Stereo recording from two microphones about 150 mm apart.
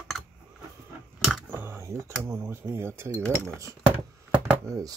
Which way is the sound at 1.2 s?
Centre (ahead or behind).